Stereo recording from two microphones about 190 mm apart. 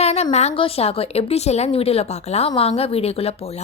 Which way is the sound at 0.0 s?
35° left (ahead or behind).